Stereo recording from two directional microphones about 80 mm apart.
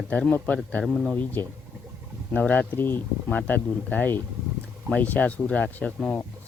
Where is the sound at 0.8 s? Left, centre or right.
Centre.